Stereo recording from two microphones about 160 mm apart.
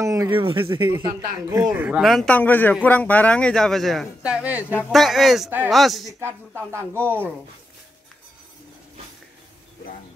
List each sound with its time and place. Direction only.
0.0 s a sound: 20° right (ahead or behind)
0.3 s speech: 30° right (ahead or behind)
1.7 s a man's voice: 5° right (ahead or behind)
6.7 s speech: 15° right (ahead or behind)